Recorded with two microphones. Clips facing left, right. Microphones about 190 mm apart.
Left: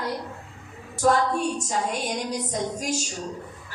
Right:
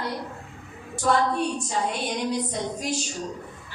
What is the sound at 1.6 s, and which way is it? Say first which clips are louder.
A woman's voice: even; 45° left (ahead or behind).